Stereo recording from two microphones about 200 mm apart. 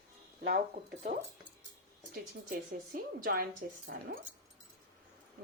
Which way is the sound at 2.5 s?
45° right (ahead or behind).